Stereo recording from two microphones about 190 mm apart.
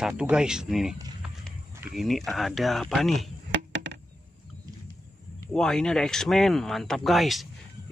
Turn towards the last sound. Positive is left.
turn(degrees=0)  # may be behind; listen again after turning